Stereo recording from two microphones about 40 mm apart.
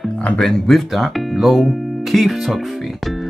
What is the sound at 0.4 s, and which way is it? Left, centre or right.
Speech, centre.